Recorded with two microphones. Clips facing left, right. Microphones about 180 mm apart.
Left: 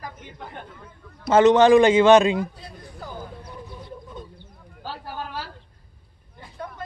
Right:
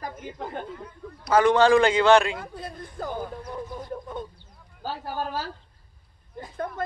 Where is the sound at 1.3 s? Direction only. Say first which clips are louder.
Left 4 dB; 20° left (ahead or behind).